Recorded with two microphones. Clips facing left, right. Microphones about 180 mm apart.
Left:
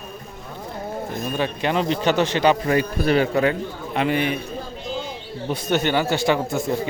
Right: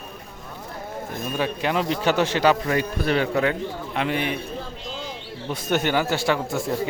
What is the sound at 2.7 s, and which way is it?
A man's voice, 5° left (ahead or behind).